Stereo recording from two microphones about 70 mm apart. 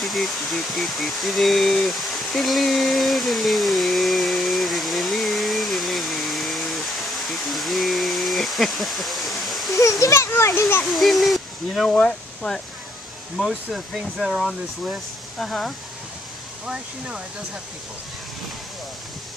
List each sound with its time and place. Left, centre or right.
0.0 s a sound: centre
9.8 s a child's voice: left
10.8 s speech: centre
11.9 s speech: centre
13.4 s speech: centre
16.6 s speech: centre